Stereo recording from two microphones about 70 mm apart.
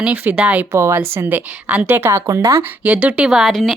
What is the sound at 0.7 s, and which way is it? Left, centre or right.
Speech, right.